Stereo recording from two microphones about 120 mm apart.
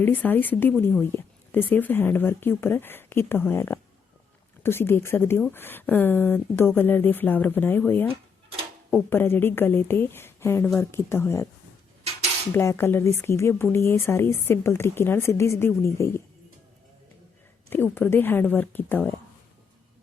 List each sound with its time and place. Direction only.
0.0 s a woman's voice: 15° left (ahead or behind)
12.5 s a woman's voice: 20° left (ahead or behind)
17.7 s speech: 15° left (ahead or behind)